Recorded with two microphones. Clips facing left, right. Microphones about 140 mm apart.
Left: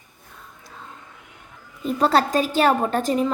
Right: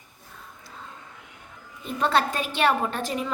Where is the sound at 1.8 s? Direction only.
40° left (ahead or behind).